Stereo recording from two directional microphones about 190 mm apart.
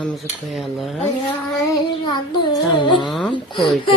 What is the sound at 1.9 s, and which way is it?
Child singing, 25° left (ahead or behind).